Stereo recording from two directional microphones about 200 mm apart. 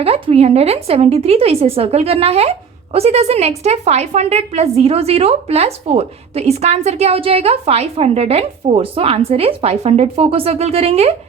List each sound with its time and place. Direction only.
0.0 s a woman's voice: 30° right (ahead or behind)